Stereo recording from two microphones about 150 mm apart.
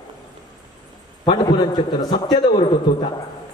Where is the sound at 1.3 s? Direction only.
30° left (ahead or behind).